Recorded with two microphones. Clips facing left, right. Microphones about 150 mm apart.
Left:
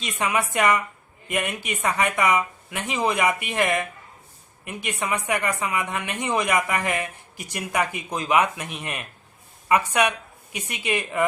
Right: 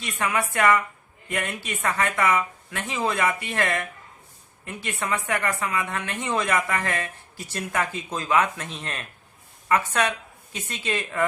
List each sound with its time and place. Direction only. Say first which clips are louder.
0.0 s a woman's voice: left 1 dB; 20° left (ahead or behind)